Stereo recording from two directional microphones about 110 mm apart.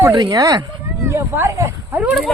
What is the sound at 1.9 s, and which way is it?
Speech, 15° right (ahead or behind).